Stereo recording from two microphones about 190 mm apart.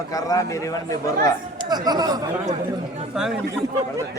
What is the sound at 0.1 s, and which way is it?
Speech, 20° left (ahead or behind).